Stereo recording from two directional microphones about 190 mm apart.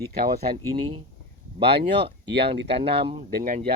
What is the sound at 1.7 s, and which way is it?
Speech, 60° right (ahead or behind).